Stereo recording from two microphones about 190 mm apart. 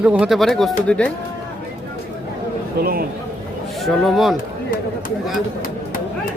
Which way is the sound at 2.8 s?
50° right (ahead or behind).